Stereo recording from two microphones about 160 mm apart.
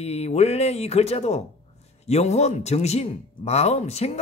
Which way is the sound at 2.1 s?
45° left (ahead or behind).